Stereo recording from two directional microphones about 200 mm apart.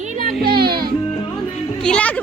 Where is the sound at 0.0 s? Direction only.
35° right (ahead or behind).